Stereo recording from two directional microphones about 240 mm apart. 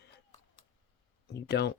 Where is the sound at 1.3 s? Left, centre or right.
Left.